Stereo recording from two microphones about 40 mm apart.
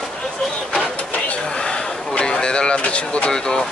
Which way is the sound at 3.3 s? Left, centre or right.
Centre.